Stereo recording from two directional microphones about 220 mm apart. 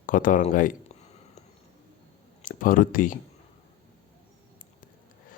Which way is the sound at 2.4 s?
35° left (ahead or behind).